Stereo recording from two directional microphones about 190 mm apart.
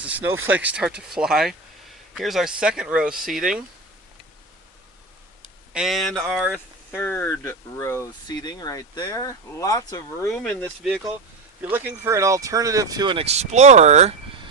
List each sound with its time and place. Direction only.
0.0 s speech: 10° right (ahead or behind)
5.7 s speech: centre (ahead or behind)
6.9 s speech: 10° left (ahead or behind)
10.2 s speech: 5° left (ahead or behind)
11.6 s speech: 10° right (ahead or behind); by 14.2 s 35° right (ahead or behind)